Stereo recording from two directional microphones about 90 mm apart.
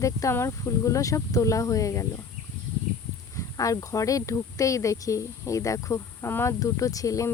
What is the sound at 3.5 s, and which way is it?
Speech, 40° left (ahead or behind).